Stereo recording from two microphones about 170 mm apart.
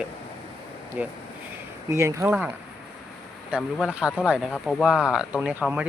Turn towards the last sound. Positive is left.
turn(degrees=-5)  # may be behind; listen again after turning